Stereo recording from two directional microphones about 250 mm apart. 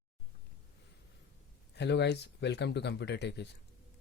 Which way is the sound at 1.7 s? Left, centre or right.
Left.